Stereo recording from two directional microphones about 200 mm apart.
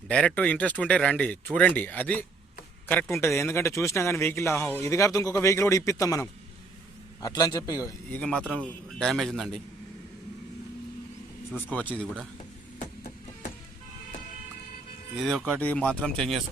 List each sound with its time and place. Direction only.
0.1 s a man's voice: 5° left (ahead or behind)
8.4 s speech: 5° left (ahead or behind)
11.5 s a man's voice: 5° left (ahead or behind)
15.1 s speech: centre (ahead or behind)